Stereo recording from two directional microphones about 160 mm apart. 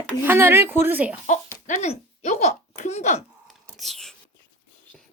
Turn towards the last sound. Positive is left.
turn(degrees=0)  # may be behind; listen again after turning